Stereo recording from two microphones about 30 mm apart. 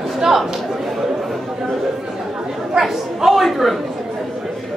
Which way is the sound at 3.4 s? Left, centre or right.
Centre.